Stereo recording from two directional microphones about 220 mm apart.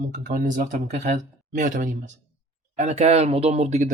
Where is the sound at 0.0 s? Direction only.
35° right (ahead or behind).